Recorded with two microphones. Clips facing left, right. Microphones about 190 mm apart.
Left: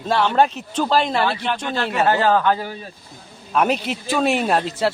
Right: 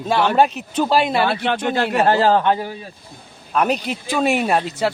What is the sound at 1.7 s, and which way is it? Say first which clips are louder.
Speech: right 2 dB; 45° right (ahead or behind).